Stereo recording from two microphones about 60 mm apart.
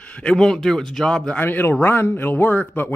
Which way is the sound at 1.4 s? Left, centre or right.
Left.